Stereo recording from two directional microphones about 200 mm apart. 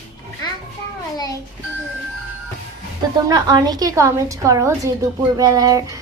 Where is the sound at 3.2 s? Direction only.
20° right (ahead or behind).